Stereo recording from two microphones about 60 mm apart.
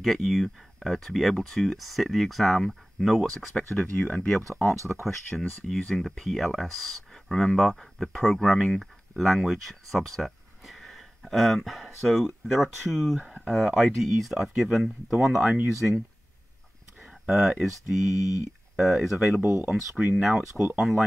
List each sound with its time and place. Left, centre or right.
0.0 s speech: centre
4.0 s speech: left
4.6 s speech: left
5.3 s speech: centre
5.8 s speech: centre
6.0 s speech: centre
17.0 s speech: centre
18.1 s speech: left
18.8 s speech: centre
19.4 s speech: left
19.7 s speech: centre